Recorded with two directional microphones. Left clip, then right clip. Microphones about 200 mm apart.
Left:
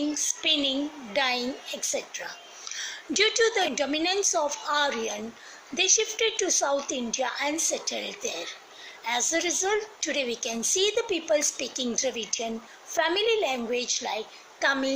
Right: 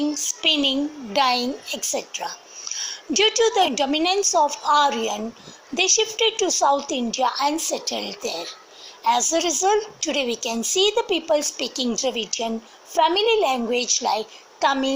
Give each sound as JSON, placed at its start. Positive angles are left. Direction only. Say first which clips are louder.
{"t": 0.1, "sound": "a woman's voice", "louder": "right 5 dB", "side_deg": -25}